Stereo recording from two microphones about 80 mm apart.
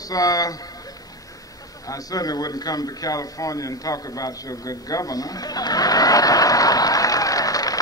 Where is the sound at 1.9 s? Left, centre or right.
Left.